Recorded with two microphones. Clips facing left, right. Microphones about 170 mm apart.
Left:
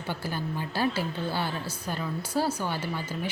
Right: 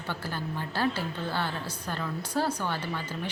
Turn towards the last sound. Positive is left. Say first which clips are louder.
# left 2 dB
turn(degrees=10)  # may be behind; listen again after turning